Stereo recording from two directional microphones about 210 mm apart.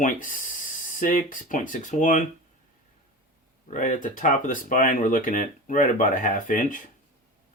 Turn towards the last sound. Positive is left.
turn(degrees=40)  # may be behind; listen again after turning